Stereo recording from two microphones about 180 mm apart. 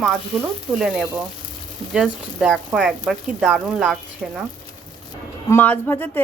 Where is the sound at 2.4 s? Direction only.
Centre (ahead or behind).